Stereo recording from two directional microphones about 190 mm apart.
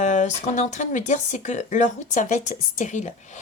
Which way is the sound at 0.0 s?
40° left (ahead or behind).